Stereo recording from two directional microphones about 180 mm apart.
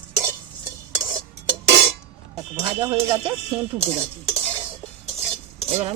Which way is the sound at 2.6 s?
25° right (ahead or behind).